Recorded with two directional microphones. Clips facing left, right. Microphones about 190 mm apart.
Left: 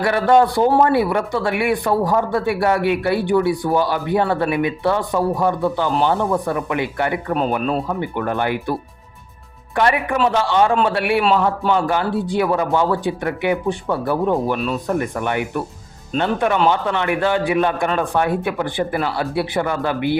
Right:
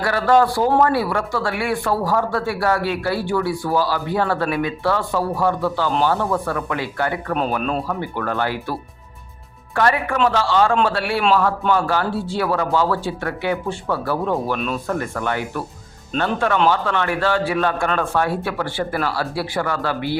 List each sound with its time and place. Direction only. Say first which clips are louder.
0.0 s speech: left 2 dB; 20° left (ahead or behind)
9.7 s speech: left 1 dB; 20° left (ahead or behind)